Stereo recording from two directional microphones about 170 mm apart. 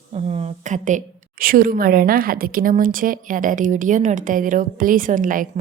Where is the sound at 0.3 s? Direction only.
40° right (ahead or behind).